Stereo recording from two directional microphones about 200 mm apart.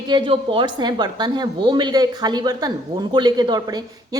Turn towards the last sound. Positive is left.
turn(degrees=-20)  # may be behind; listen again after turning